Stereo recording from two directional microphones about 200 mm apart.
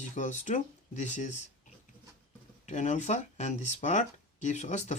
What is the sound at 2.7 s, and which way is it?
Speech, 35° left (ahead or behind).